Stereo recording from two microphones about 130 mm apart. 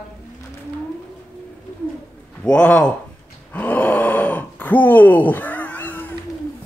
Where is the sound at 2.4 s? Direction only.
10° left (ahead or behind).